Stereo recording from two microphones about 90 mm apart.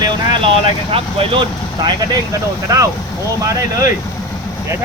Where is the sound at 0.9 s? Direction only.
90° right.